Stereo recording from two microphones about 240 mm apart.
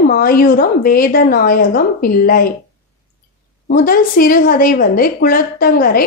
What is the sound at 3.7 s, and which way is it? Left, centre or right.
A woman's voice, left.